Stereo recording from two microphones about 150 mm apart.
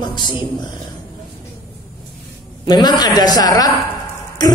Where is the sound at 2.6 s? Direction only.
30° left (ahead or behind).